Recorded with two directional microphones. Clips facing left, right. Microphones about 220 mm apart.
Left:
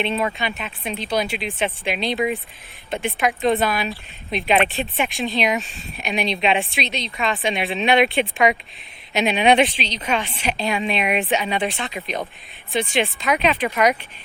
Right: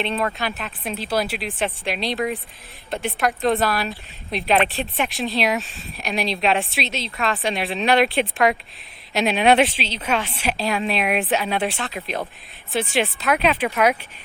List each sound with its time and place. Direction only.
0.0 s speech: centre (ahead or behind)